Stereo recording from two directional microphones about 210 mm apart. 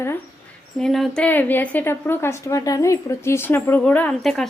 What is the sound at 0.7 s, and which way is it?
A woman's voice, centre (ahead or behind).